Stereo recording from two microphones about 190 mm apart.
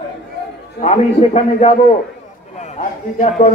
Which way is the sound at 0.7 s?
35° left (ahead or behind).